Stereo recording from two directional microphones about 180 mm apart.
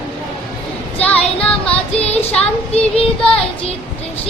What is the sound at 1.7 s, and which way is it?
Child singing, 35° left (ahead or behind).